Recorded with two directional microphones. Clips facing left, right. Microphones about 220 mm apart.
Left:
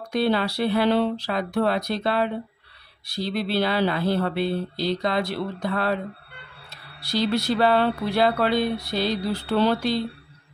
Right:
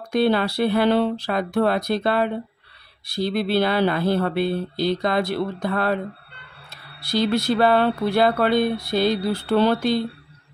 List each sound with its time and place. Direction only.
0.1 s speech: 50° right (ahead or behind)
7.0 s speech: 50° right (ahead or behind)